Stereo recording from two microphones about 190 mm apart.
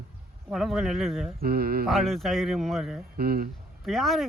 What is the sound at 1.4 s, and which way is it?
Speech, 55° right (ahead or behind).